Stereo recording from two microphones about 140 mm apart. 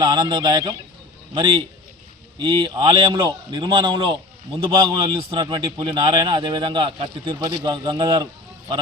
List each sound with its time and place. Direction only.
0.0 s a man's voice: 30° right (ahead or behind)